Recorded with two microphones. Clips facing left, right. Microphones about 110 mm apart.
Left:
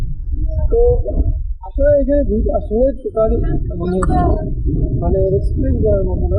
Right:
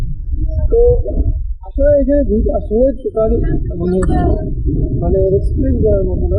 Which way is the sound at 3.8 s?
55° left (ahead or behind).